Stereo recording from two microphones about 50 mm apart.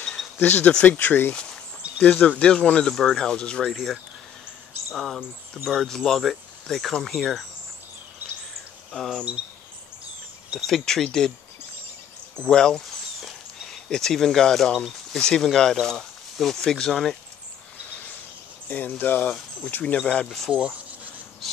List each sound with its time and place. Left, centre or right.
0.4 s speech: left
1.3 s walk: centre
2.0 s speech: left
2.9 s speech: centre
3.6 s speech: centre
8.9 s speech: centre
10.7 s speech: centre
12.4 s speech: centre
12.8 s a sound: centre
15.8 s speech: centre
18.7 s speech: left
20.2 s speech: centre
20.5 s speech: centre